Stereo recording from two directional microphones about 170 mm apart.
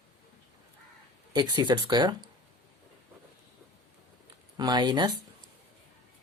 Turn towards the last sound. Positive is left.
turn(degrees=-25)  # may be behind; listen again after turning